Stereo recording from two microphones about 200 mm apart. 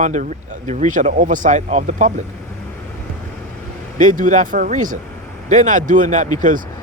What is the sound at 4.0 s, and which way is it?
Speech, 40° right (ahead or behind).